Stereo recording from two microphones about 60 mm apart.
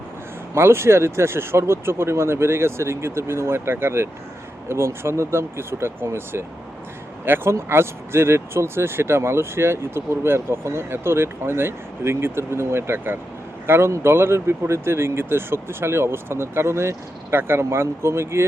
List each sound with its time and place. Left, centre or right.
0.5 s speech: right